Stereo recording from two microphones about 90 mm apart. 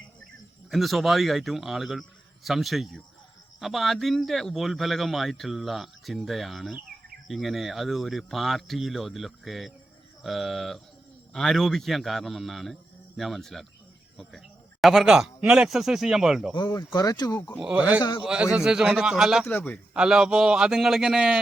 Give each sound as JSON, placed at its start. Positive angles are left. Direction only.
{"t": 0.7, "sound": "a man's voice", "side_deg": 0}
{"t": 16.7, "sound": "speech", "side_deg": 45}
{"t": 17.6, "sound": "a man's voice", "side_deg": -15}
{"t": 19.5, "sound": "a man's voice", "side_deg": 20}
{"t": 19.9, "sound": "a man's voice", "side_deg": -5}